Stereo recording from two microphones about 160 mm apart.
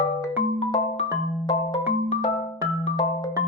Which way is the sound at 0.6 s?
40° left (ahead or behind).